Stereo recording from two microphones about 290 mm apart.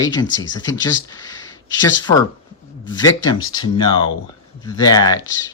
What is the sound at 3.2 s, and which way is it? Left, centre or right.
Speech, centre.